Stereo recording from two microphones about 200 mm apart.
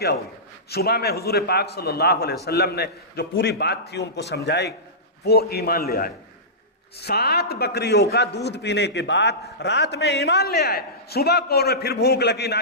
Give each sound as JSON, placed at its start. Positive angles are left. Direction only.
{"t": 0.7, "sound": "a man's voice", "side_deg": 50}